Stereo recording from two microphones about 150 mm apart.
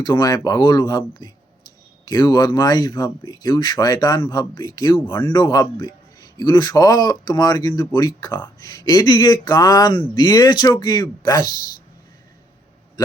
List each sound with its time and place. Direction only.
0.0 s speech: 25° left (ahead or behind)